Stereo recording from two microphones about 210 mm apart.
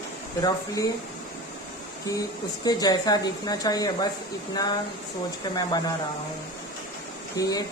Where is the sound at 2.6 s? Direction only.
20° left (ahead or behind).